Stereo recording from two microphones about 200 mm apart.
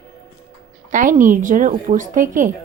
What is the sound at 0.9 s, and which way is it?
Speech, 40° right (ahead or behind).